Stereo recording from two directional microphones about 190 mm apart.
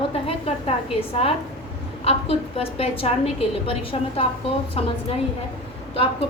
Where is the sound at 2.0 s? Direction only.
30° left (ahead or behind).